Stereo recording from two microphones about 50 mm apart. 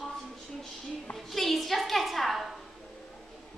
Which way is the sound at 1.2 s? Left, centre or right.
Centre.